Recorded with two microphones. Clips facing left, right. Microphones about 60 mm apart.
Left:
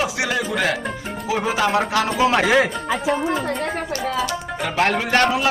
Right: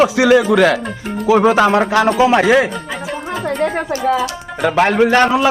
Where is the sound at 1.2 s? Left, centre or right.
Right.